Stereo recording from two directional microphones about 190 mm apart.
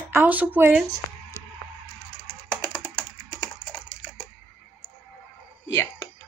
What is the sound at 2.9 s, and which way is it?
Typing, 25° left (ahead or behind).